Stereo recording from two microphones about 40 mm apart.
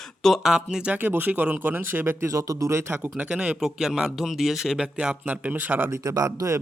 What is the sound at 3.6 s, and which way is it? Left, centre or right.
Speech, centre.